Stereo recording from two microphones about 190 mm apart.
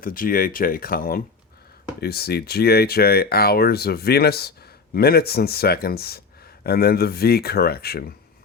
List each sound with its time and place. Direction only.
0.0 s speech: 50° left (ahead or behind)